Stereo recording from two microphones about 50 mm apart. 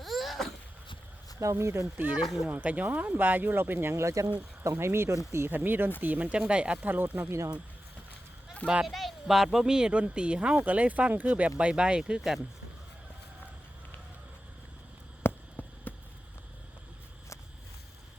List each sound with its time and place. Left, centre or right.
0.0 s wail: centre
1.4 s speech: right
2.2 s speech: centre
2.5 s speech: right
3.9 s speech: right
4.6 s speech: right
5.5 s speech: right
6.5 s speech: right
6.8 s speech: right
8.6 s speech: right
8.9 s speech: centre
15.2 s a sound: left